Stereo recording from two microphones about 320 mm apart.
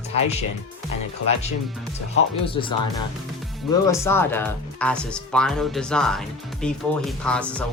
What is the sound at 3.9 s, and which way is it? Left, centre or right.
Speech, centre.